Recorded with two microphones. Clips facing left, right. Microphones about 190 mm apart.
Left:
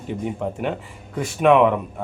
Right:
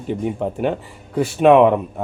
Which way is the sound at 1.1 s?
30° right (ahead or behind).